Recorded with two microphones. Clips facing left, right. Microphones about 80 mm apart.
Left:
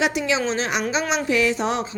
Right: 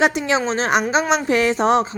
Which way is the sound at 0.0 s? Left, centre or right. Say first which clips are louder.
Right 4 dB; right.